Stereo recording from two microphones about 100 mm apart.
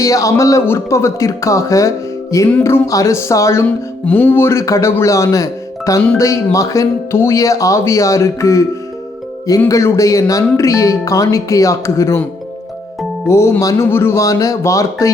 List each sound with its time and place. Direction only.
0.0 s speech: 35° left (ahead or behind)
4.0 s speech: 15° left (ahead or behind)
9.6 s speech: 30° left (ahead or behind)
13.2 s speech: 25° left (ahead or behind)